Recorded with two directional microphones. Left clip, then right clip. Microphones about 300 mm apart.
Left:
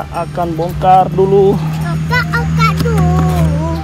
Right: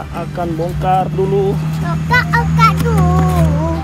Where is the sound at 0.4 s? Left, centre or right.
Left.